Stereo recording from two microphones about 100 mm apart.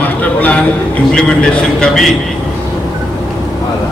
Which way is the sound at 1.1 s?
10° left (ahead or behind).